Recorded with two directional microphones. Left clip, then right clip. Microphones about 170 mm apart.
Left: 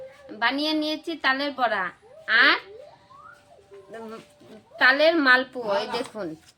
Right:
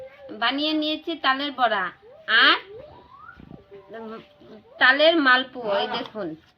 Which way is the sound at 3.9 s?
20° left (ahead or behind).